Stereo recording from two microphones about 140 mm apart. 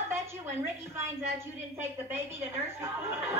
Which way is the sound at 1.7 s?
15° right (ahead or behind).